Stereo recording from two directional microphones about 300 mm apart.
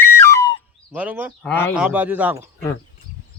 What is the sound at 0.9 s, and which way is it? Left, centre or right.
Speech, centre.